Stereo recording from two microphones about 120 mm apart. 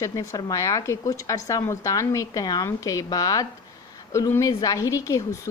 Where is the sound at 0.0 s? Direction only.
25° left (ahead or behind).